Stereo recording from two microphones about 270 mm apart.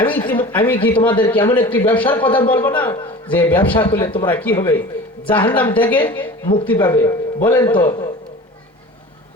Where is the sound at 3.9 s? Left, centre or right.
Centre.